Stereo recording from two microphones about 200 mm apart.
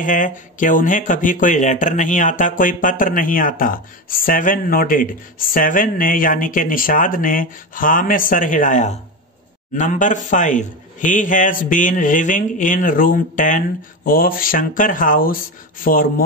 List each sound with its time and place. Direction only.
0.0 s a man's voice: 40° left (ahead or behind)